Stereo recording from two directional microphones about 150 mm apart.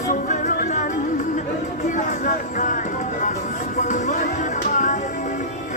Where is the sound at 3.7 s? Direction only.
55° left (ahead or behind).